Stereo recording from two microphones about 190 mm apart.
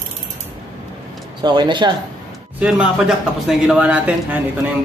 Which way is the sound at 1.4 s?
25° right (ahead or behind).